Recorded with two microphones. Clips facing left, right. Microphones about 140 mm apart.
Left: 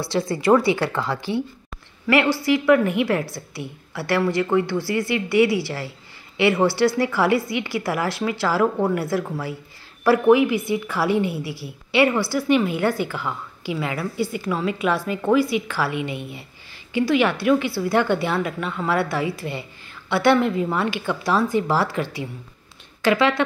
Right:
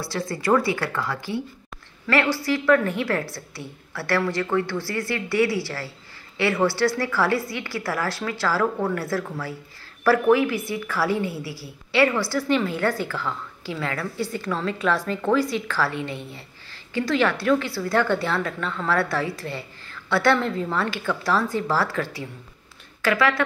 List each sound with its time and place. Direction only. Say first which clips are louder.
0.1 s speech: left 4 dB; 20° left (ahead or behind)
2.3 s a woman's voice: left 3 dB; 15° left (ahead or behind)